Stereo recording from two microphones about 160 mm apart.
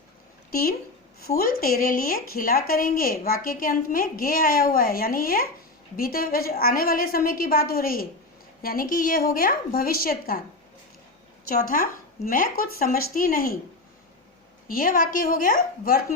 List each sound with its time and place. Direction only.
0.5 s speech: 65° left (ahead or behind)
11.4 s speech: 60° left (ahead or behind)
14.7 s speech: 60° left (ahead or behind)